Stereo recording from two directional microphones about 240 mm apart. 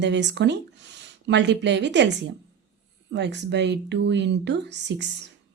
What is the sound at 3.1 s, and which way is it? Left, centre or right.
A woman's voice, right.